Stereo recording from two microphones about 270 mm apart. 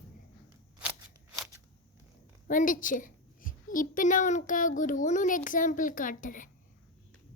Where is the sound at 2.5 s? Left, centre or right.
Left.